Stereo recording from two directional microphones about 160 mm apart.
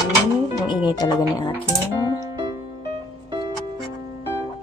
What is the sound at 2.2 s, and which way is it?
Music, 25° right (ahead or behind).